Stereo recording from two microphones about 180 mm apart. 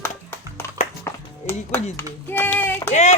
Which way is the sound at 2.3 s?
10° left (ahead or behind).